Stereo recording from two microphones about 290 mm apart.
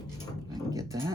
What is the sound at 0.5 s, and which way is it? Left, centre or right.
Speech, centre.